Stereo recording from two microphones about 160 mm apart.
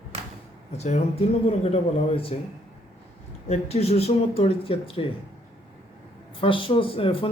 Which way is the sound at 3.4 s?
40° left (ahead or behind).